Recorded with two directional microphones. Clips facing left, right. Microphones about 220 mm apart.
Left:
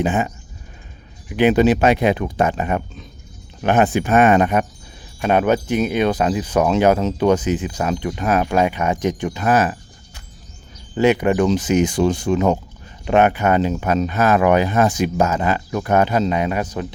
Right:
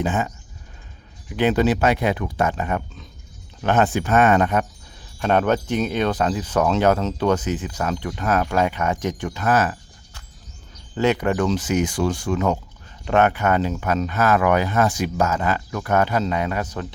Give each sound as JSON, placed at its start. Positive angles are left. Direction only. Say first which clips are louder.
{"t": 0.0, "sound": "speech", "louder": "left 4 dB", "side_deg": 15}
{"t": 1.3, "sound": "speech", "louder": "left 4 dB", "side_deg": 15}
{"t": 10.9, "sound": "speech", "louder": "left 4 dB", "side_deg": 15}